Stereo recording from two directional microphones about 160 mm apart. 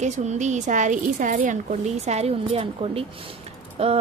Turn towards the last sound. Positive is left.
turn(degrees=-40)  # may be behind; listen again after turning